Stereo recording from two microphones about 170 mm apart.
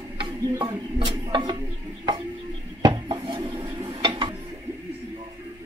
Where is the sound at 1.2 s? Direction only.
25° right (ahead or behind).